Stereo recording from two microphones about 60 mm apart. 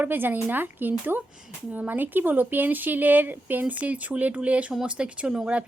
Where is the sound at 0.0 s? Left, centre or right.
Right.